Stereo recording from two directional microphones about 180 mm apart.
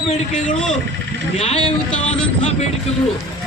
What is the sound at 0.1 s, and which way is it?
Speech, 40° left (ahead or behind).